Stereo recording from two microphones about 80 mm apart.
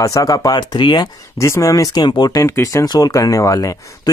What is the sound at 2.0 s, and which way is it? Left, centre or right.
Speech, left.